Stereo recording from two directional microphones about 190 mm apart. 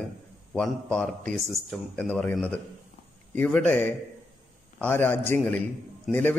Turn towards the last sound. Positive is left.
turn(degrees=0)  # may be behind; listen again after turning